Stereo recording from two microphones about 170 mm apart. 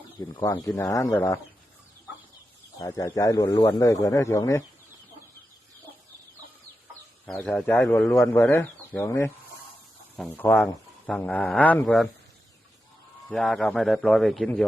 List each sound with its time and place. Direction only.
0.3 s speech: 25° left (ahead or behind)
2.9 s speech: 20° left (ahead or behind)
7.3 s speech: 10° left (ahead or behind)
13.2 s a man's voice: centre (ahead or behind)